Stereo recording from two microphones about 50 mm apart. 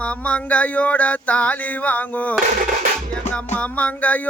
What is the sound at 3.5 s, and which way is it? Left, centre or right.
Music, left.